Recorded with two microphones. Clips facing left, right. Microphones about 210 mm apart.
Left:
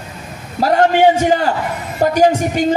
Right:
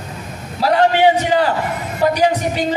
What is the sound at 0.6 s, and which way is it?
Speech, 45° left (ahead or behind).